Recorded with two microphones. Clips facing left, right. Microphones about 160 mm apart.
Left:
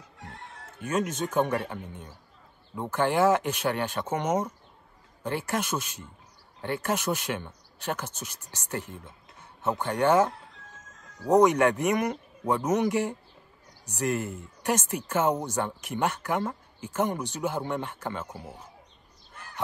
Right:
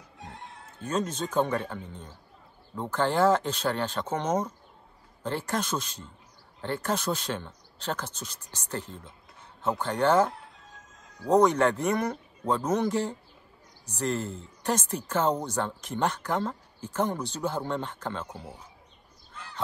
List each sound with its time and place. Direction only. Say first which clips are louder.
0.2 s chicken: right 1 dB; 20° right (ahead or behind)
0.7 s speech: left 1 dB; 10° left (ahead or behind)